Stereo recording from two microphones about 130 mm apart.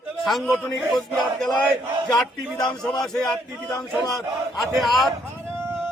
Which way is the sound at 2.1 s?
25° left (ahead or behind).